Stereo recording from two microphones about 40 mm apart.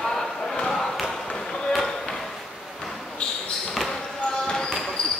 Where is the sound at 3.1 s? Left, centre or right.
Left.